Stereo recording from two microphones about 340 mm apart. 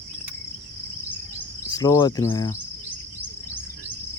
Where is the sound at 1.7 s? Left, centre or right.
Centre.